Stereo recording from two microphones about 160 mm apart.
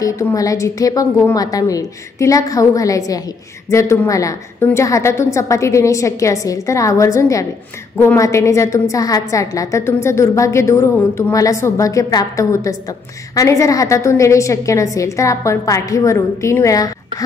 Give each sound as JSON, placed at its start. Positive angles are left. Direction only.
{"t": 0.0, "sound": "a woman's voice", "side_deg": 20}